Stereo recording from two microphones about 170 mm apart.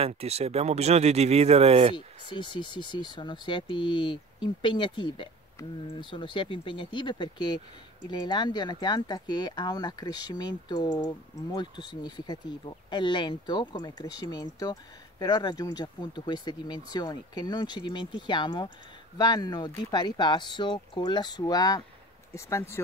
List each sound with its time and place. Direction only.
0.0 s speech: 35° right (ahead or behind)
2.0 s speech: 30° left (ahead or behind)